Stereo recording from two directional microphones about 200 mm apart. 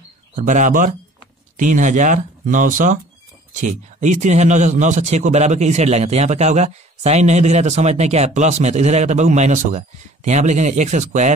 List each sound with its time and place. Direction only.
0.4 s a man's voice: 40° right (ahead or behind)